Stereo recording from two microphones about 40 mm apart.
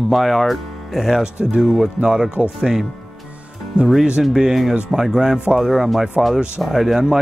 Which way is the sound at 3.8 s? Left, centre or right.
Right.